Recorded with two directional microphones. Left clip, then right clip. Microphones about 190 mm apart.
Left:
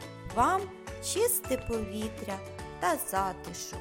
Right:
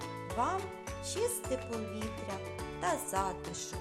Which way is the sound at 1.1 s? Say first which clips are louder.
Left 6 dB; 30° left (ahead or behind).